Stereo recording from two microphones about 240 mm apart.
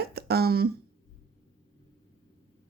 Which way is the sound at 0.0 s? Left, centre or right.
Right.